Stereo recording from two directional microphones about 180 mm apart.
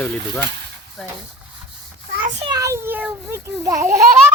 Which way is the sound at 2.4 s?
20° right (ahead or behind).